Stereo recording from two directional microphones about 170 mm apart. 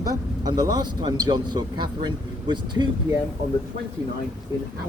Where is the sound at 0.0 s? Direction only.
20° right (ahead or behind).